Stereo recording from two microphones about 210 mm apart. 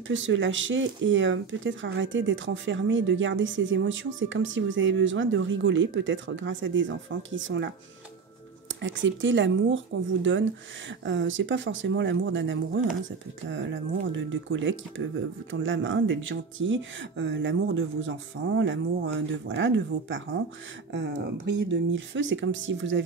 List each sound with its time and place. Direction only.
0.1 s speech: 65° right (ahead or behind)
8.8 s speech: 65° right (ahead or behind)
11.1 s speech: 65° right (ahead or behind)